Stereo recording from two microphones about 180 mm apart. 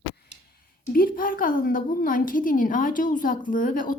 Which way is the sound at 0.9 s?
55° left (ahead or behind).